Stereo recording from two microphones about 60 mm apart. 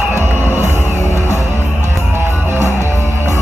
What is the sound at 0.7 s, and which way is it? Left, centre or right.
Music, left.